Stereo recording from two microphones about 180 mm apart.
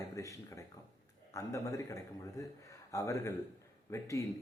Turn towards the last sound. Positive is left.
turn(degrees=15)  # may be behind; listen again after turning